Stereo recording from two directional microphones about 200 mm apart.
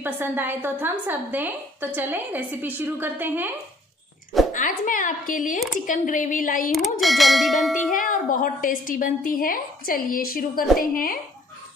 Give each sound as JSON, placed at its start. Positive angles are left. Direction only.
{"t": 0.0, "sound": "a woman's voice", "side_deg": -10}
{"t": 4.5, "sound": "speech", "side_deg": 40}
{"t": 6.7, "sound": "a sound", "side_deg": 0}
{"t": 7.9, "sound": "a woman's voice", "side_deg": 40}